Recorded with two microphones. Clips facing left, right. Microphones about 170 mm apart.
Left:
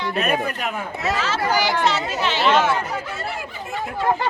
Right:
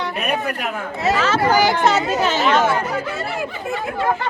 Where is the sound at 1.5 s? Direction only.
50° right (ahead or behind).